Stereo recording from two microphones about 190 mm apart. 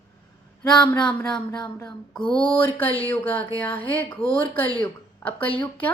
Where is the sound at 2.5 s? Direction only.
10° left (ahead or behind).